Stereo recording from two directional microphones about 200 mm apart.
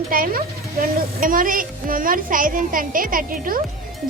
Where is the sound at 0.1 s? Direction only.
45° right (ahead or behind).